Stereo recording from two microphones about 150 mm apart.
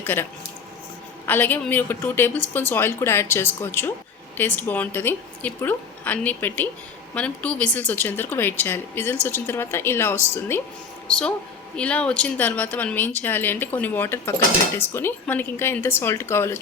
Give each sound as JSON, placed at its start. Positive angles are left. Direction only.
{"t": 0.0, "sound": "speech", "side_deg": 15}
{"t": 1.3, "sound": "speech", "side_deg": 10}